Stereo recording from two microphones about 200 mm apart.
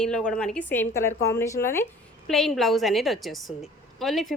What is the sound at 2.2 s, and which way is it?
A woman's voice, centre (ahead or behind).